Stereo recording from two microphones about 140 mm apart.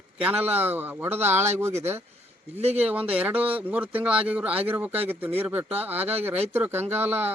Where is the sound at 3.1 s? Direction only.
10° right (ahead or behind).